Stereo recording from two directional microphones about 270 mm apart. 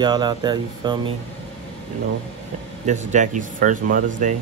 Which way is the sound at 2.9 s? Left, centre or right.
Right.